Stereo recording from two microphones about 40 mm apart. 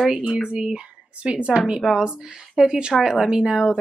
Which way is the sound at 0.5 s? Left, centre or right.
Centre.